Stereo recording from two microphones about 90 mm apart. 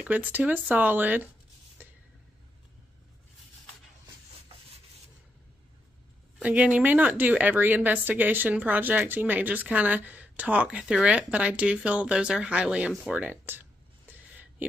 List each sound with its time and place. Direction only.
0.0 s speech: 20° right (ahead or behind)
6.4 s a woman's voice: 15° right (ahead or behind)
13.1 s a sound: 20° right (ahead or behind)